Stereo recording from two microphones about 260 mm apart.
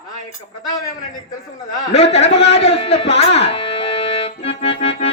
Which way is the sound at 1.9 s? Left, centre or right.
Left.